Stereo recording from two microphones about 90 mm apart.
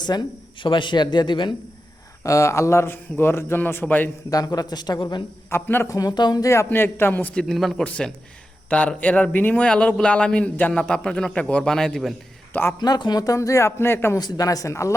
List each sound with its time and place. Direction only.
0.0 s speech: 55° left (ahead or behind)
2.2 s a man's voice: 35° left (ahead or behind)
4.3 s speech: 45° left (ahead or behind)
5.5 s a man's voice: 25° left (ahead or behind)
5.9 s speech: 45° left (ahead or behind)
6.7 s a man's voice: 25° left (ahead or behind)
7.3 s speech: centre (ahead or behind)
7.9 s a man's voice: 10° left (ahead or behind)
9.6 s a man's voice: 10° left (ahead or behind)
12.8 s speech: 50° left (ahead or behind); by 14.2 s 25° left (ahead or behind)
14.2 s speech: 45° left (ahead or behind)